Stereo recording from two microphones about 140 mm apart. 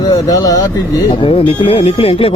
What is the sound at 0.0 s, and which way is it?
Speech, 25° left (ahead or behind).